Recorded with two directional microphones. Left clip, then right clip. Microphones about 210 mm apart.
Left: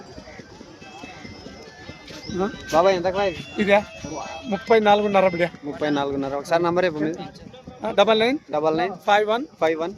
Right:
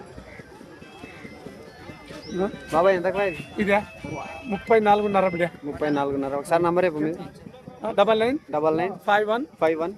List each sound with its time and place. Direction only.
2.7 s a man's voice: centre (ahead or behind)
3.6 s speech: 20° left (ahead or behind)
5.8 s a man's voice: 5° left (ahead or behind)
7.8 s speech: 30° left (ahead or behind)
8.4 s speech: 10° left (ahead or behind)
9.0 s speech: 30° left (ahead or behind)
9.6 s a man's voice: 5° left (ahead or behind)